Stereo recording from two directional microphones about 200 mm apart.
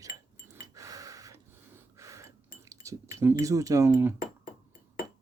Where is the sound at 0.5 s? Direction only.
15° right (ahead or behind).